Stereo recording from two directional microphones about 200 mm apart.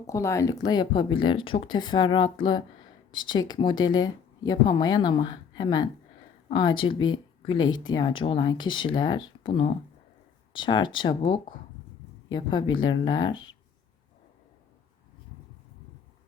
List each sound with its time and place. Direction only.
0.1 s speech: 15° left (ahead or behind)
12.3 s speech: 20° left (ahead or behind)